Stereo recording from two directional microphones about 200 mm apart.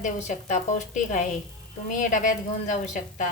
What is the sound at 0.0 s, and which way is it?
A woman's voice, 35° left (ahead or behind).